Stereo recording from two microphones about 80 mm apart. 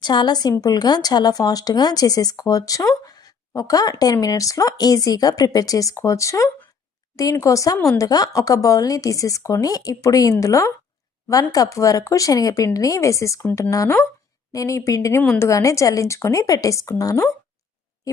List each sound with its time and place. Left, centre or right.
0.0 s a woman's voice: left